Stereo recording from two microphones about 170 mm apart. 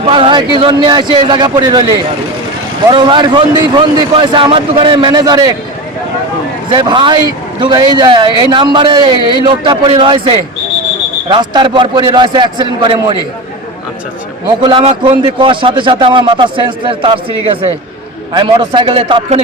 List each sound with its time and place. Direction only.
0.0 s a man's voice: 30° right (ahead or behind)
2.9 s a man's voice: 30° right (ahead or behind)
6.7 s a man's voice: 30° right (ahead or behind)
14.6 s a man's voice: 25° right (ahead or behind)